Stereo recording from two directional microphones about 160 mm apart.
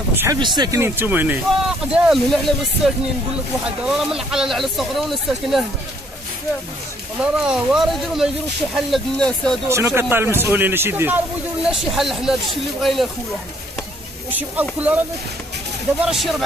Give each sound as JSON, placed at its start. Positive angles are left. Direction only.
{"t": 0.1, "sound": "speech", "side_deg": -15}
{"t": 0.4, "sound": "speech", "side_deg": -25}
{"t": 0.7, "sound": "speech", "side_deg": -15}
{"t": 2.0, "sound": "speech", "side_deg": 0}
{"t": 7.2, "sound": "speech", "side_deg": -5}
{"t": 9.7, "sound": "speech", "side_deg": -15}
{"t": 11.6, "sound": "speech", "side_deg": -5}
{"t": 14.3, "sound": "speech", "side_deg": -10}
{"t": 16.1, "sound": "speech", "side_deg": 0}